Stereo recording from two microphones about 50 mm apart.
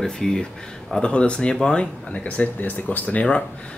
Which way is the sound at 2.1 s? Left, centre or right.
Left.